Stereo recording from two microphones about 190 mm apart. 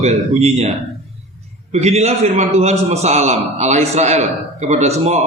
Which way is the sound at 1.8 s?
35° right (ahead or behind).